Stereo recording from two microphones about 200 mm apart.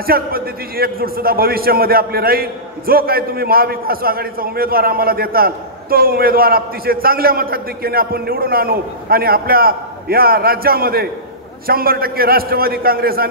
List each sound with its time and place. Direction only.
0.0 s a man's voice: 50° right (ahead or behind)